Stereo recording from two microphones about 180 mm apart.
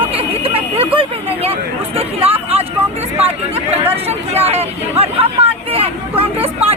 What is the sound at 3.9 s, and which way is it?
Speech, 35° right (ahead or behind).